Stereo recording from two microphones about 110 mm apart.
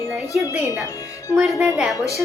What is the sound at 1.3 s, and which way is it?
Speech, 10° right (ahead or behind).